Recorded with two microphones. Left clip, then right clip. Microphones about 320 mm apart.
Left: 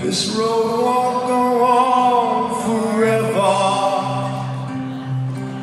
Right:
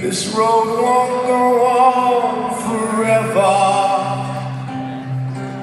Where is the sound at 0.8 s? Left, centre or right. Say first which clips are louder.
Right 2 dB; centre.